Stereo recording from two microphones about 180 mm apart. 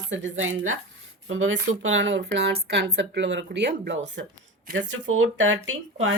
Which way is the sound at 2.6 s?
60° right (ahead or behind).